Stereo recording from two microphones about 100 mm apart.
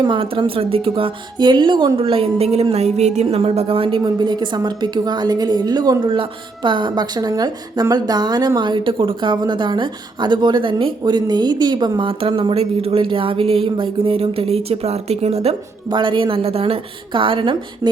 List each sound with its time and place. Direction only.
0.2 s a woman's voice: 65° right (ahead or behind)
4.0 s a woman's voice: 50° right (ahead or behind)
6.1 s a woman's voice: 55° right (ahead or behind); by 15.5 s 90° right
15.9 s a woman's voice: 55° right (ahead or behind)